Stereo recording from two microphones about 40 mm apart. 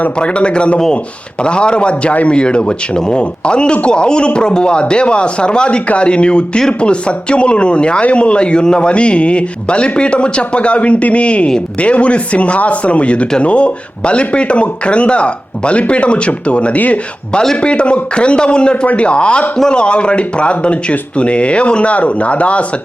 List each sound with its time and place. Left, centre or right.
0.2 s a man's voice: left
16.7 s speech: left
17.6 s a man's voice: left